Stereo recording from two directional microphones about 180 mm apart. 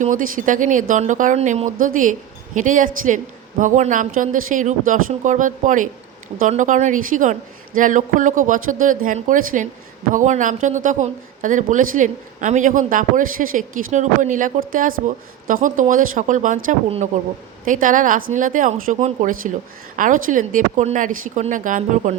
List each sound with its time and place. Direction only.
0.0 s a man's voice: 45° right (ahead or behind)